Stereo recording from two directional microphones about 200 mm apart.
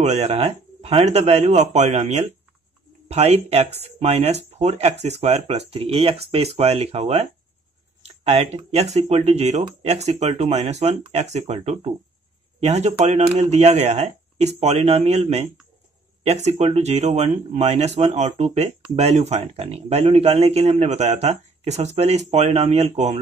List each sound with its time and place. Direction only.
0.0 s a man's voice: 30° right (ahead or behind)